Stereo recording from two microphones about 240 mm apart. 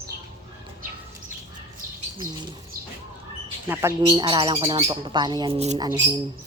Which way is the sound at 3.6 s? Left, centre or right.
Centre.